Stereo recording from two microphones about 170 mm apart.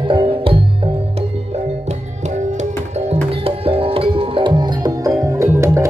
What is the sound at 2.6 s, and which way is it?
Music, 40° right (ahead or behind).